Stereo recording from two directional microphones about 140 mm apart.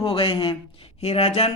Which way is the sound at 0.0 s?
40° left (ahead or behind).